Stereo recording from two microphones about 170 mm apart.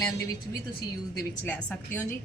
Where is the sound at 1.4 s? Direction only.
10° left (ahead or behind).